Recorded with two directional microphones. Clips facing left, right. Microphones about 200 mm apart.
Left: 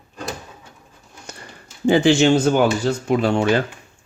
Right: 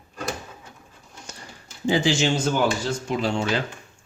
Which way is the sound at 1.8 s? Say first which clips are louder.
Left 7 dB; 60° left (ahead or behind).